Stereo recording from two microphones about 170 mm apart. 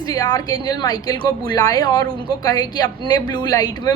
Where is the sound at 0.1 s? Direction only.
20° left (ahead or behind).